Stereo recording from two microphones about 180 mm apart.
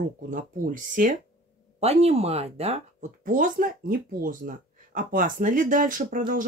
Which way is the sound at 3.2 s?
50° right (ahead or behind).